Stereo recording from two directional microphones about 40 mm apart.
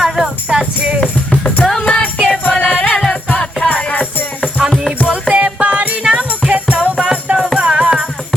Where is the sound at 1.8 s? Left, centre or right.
Left.